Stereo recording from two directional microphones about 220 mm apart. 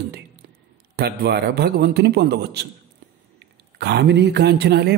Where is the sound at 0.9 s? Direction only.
45° right (ahead or behind).